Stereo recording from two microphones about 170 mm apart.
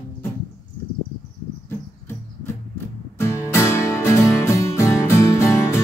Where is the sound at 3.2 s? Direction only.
15° left (ahead or behind).